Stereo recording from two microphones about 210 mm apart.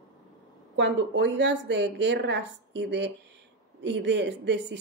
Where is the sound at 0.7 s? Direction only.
55° right (ahead or behind).